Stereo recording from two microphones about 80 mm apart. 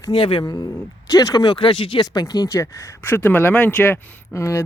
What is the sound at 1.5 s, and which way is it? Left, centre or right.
Speech, left.